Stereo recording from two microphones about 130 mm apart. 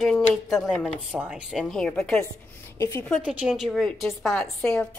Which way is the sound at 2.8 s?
20° left (ahead or behind).